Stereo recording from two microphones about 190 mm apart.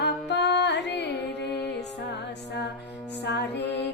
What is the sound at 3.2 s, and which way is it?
Music, 60° left (ahead or behind).